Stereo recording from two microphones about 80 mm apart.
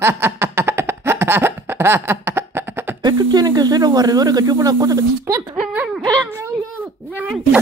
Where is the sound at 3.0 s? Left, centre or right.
Right.